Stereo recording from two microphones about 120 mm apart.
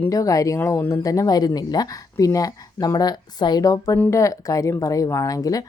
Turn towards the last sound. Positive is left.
turn(degrees=30)  # may be behind; listen again after turning